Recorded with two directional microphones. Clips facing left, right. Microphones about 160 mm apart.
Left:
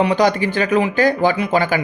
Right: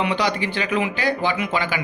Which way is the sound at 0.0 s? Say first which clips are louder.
Left 7 dB; 45° left (ahead or behind).